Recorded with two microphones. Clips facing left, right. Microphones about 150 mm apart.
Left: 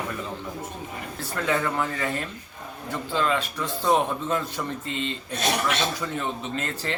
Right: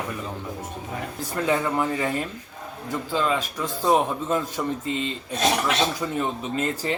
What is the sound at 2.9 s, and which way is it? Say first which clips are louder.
Speech: right 1 dB; 5° right (ahead or behind).